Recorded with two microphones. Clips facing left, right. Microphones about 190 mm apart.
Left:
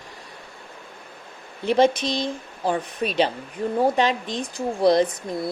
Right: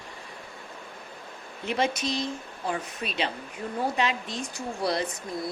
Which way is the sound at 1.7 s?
35° left (ahead or behind).